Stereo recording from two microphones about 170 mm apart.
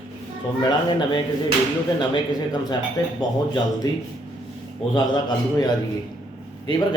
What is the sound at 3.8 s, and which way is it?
A man's voice, 25° left (ahead or behind).